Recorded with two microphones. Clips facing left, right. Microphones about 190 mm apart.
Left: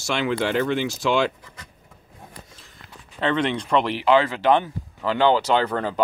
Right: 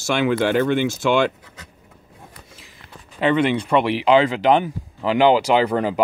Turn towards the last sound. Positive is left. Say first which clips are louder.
# right 4 dB
turn(degrees=-10)  # may be behind; listen again after turning